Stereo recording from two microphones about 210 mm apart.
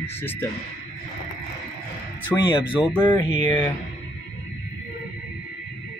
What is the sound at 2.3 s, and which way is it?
Speech, 20° left (ahead or behind).